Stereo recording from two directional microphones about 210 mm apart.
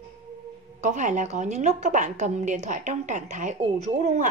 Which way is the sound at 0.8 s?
35° right (ahead or behind).